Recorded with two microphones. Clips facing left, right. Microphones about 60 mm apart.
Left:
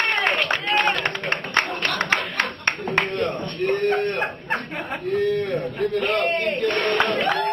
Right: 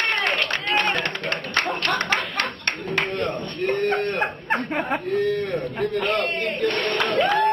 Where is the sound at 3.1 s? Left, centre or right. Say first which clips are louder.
Left 1 dB; centre.